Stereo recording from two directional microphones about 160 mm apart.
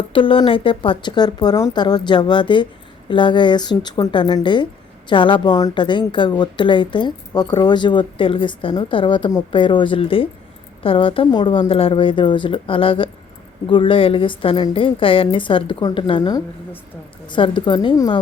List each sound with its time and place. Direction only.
0.1 s a woman's voice: 35° left (ahead or behind)